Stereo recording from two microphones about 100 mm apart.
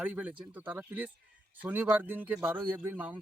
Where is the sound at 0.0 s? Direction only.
15° right (ahead or behind).